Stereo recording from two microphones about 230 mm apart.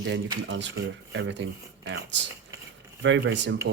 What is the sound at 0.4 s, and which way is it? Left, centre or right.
Speech, right.